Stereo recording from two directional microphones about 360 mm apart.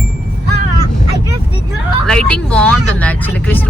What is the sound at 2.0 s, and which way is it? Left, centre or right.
Speech, centre.